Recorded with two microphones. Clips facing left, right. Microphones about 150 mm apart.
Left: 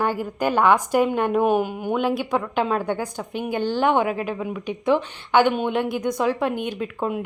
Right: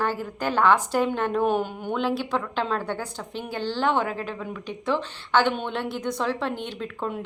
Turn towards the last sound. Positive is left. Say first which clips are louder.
# left 5 dB
turn(degrees=10)  # may be behind; listen again after turning